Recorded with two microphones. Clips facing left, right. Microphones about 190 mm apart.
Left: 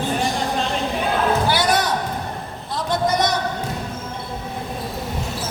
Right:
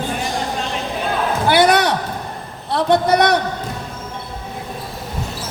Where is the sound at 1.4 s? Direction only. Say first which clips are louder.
Right 5 dB; 65° right (ahead or behind).